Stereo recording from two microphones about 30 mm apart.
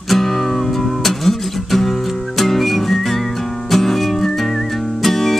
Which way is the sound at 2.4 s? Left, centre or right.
Centre.